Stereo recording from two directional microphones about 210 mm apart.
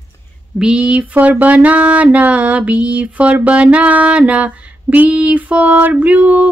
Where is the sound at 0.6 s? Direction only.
5° right (ahead or behind).